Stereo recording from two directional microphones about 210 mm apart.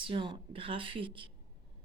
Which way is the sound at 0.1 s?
25° right (ahead or behind).